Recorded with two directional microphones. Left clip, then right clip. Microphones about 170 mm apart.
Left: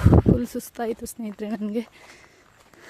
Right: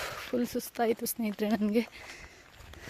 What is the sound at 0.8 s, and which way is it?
Speech, 15° left (ahead or behind).